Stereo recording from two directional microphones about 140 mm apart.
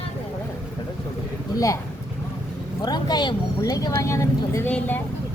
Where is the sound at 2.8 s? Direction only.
30° left (ahead or behind); by 5.0 s 10° left (ahead or behind).